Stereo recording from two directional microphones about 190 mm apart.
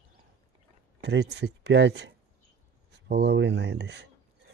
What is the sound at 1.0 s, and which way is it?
Speech, 60° right (ahead or behind).